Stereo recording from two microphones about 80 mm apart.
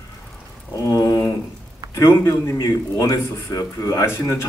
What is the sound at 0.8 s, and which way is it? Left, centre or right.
A man's voice, left.